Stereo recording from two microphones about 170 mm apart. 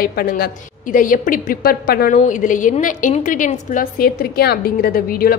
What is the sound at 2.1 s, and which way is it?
A woman's voice, 50° left (ahead or behind).